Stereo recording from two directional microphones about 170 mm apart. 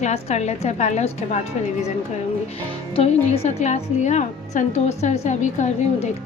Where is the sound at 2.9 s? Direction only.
35° left (ahead or behind).